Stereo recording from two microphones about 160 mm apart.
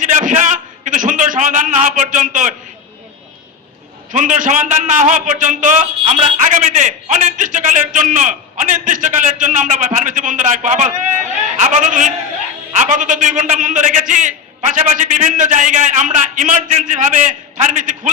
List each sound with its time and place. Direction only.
0.0 s a sound: 50° right (ahead or behind)
0.9 s a man's voice: 55° right (ahead or behind)
4.1 s a man's voice: 50° right (ahead or behind)